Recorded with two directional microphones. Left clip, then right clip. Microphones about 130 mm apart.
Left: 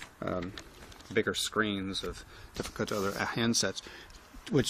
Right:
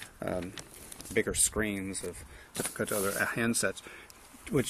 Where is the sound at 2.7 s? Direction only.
20° left (ahead or behind).